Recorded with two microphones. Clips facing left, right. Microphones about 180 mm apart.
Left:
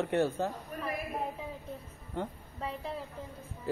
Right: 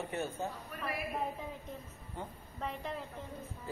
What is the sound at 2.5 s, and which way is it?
Speech, 5° left (ahead or behind).